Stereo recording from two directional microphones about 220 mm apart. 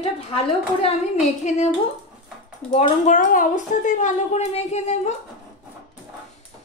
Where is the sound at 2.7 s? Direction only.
30° left (ahead or behind).